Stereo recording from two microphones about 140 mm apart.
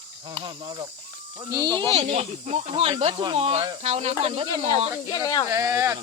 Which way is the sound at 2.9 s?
40° right (ahead or behind).